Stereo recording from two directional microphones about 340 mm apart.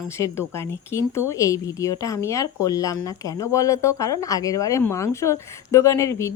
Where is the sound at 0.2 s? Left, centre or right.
Centre.